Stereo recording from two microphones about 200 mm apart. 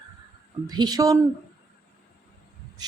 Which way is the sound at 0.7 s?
20° right (ahead or behind).